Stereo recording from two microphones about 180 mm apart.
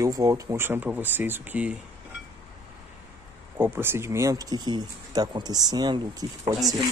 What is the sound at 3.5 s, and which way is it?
Speech, 15° right (ahead or behind).